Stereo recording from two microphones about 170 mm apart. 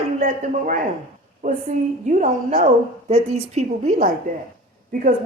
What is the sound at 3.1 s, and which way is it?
A woman's voice, 40° right (ahead or behind).